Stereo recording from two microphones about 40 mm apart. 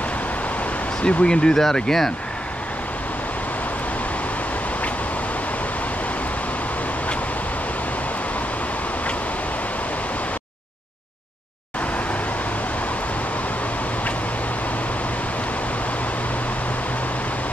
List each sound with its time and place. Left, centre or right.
1.0 s speech: left